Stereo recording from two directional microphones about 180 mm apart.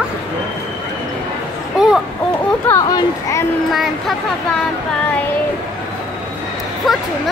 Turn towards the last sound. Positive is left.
turn(degrees=0)  # may be behind; listen again after turning